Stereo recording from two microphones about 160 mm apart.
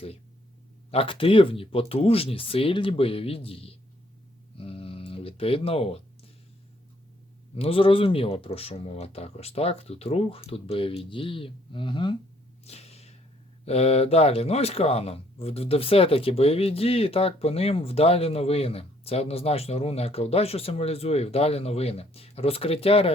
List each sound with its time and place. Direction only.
0.9 s speech: 35° left (ahead or behind)
4.5 s a sound: 35° left (ahead or behind)
7.5 s speech: 35° left (ahead or behind)
12.6 s whip: 40° left (ahead or behind)
13.7 s speech: 40° left (ahead or behind)